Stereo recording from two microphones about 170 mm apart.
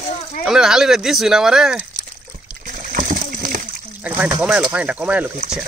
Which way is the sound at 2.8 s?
50° right (ahead or behind).